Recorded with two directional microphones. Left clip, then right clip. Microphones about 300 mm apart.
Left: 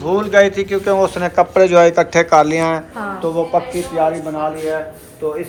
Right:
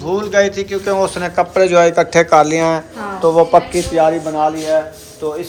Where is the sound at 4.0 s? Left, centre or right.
Right.